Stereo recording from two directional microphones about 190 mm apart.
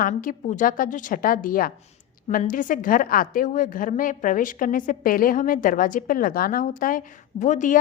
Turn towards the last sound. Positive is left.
turn(degrees=40)  # may be behind; listen again after turning